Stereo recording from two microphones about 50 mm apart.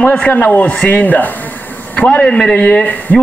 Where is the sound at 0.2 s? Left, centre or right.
Left.